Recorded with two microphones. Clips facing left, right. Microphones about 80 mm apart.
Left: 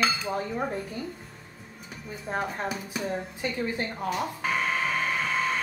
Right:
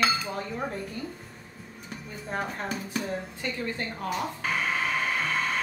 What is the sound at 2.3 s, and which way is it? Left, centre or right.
Speech, centre.